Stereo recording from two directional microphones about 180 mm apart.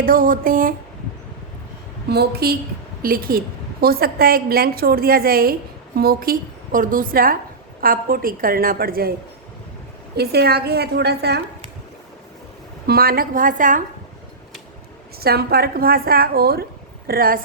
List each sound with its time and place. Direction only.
0.0 s a woman's voice: 50° right (ahead or behind)
2.0 s a woman's voice: 60° right (ahead or behind)
10.2 s a woman's voice: 60° right (ahead or behind)
12.9 s a woman's voice: 55° right (ahead or behind)
15.2 s a woman's voice: 60° right (ahead or behind)